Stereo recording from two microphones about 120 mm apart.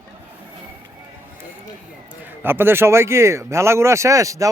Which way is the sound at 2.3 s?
20° right (ahead or behind).